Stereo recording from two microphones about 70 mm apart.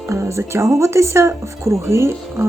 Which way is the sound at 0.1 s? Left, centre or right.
Right.